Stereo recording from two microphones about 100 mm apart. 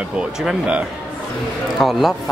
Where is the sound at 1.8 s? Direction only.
Centre (ahead or behind).